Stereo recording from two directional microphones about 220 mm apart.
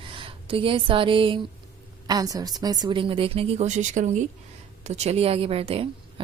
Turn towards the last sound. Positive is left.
turn(degrees=-25)  # may be behind; listen again after turning